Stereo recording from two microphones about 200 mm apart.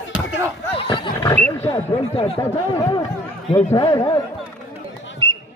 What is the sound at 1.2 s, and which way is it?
Roaring cats, 10° left (ahead or behind).